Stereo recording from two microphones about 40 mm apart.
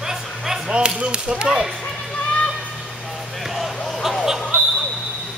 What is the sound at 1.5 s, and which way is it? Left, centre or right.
Speech, centre.